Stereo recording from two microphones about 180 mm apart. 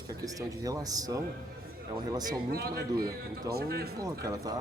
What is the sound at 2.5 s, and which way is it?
A man's voice, 60° right (ahead or behind).